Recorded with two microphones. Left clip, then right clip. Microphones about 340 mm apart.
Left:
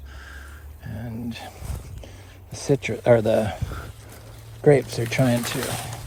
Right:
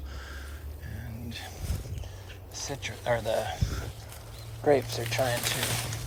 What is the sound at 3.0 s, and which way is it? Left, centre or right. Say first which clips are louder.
Speech: left 9 dB; left.